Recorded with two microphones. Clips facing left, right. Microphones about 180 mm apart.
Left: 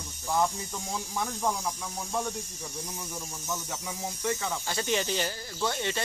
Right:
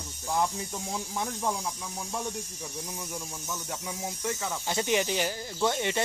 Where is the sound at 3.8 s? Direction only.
5° right (ahead or behind).